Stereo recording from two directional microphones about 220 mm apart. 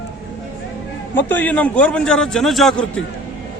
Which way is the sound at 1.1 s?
10° left (ahead or behind).